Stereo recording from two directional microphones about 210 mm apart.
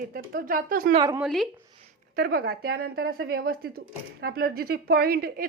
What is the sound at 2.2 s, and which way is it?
Speech, 45° right (ahead or behind).